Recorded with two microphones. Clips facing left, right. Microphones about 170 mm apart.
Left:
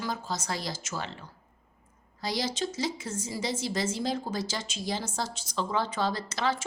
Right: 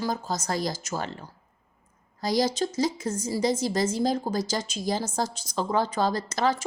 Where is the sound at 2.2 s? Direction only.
40° right (ahead or behind).